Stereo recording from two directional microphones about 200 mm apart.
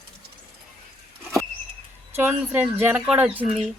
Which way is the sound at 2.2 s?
10° right (ahead or behind).